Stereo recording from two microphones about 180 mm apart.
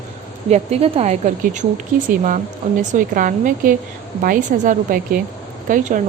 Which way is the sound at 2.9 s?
50° right (ahead or behind).